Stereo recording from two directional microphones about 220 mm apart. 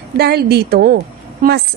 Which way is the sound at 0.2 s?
45° right (ahead or behind).